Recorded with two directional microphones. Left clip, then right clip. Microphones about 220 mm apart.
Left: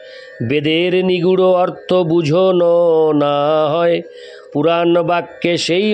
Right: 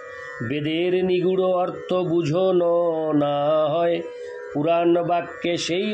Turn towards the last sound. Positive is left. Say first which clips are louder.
# left 8 dB
turn(degrees=45)  # may be behind; listen again after turning